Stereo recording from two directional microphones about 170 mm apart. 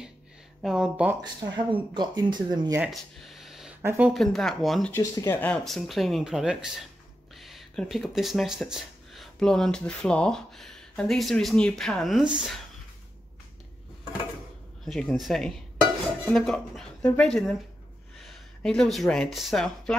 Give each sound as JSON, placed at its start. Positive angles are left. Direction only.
{"t": 0.6, "sound": "speech", "side_deg": -5}
{"t": 1.2, "sound": "speech", "side_deg": -25}
{"t": 2.8, "sound": "a sound", "side_deg": 0}
{"t": 3.8, "sound": "speech", "side_deg": -15}
{"t": 4.1, "sound": "speech", "side_deg": 0}
{"t": 4.9, "sound": "speech", "side_deg": 15}
{"t": 14.9, "sound": "speech", "side_deg": 5}